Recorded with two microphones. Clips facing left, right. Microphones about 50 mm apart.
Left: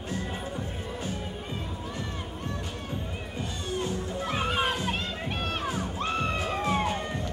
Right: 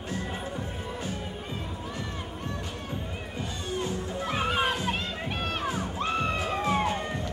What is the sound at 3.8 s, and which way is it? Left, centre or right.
Music, centre.